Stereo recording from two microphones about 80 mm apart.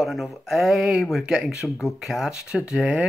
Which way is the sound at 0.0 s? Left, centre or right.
Centre.